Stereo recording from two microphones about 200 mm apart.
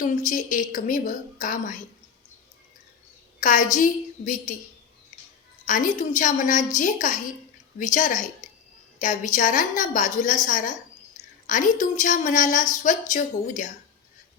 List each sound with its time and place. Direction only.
0.0 s a woman's voice: 40° left (ahead or behind)
3.4 s a woman's voice: 40° left (ahead or behind)
5.6 s a woman's voice: 40° left (ahead or behind)